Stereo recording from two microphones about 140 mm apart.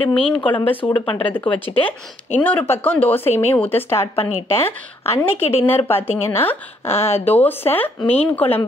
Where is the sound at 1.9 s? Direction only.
15° left (ahead or behind).